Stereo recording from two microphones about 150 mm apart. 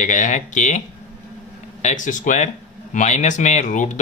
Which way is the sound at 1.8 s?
55° left (ahead or behind).